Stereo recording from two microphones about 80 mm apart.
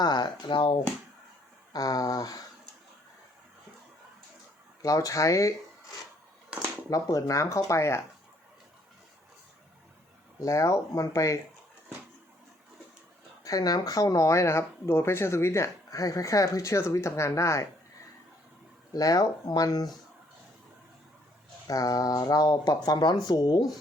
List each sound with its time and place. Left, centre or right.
0.0 s speech: left
1.7 s speech: left
4.8 s speech: left
6.5 s a sound: centre
6.9 s speech: left
10.4 s speech: left
13.4 s speech: left
18.9 s speech: left
21.7 s speech: left